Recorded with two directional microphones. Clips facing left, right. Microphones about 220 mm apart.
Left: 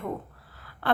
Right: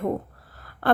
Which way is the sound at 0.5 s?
45° right (ahead or behind).